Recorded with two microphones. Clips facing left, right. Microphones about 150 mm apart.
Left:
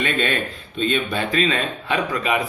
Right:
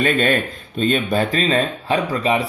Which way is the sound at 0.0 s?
45° right (ahead or behind).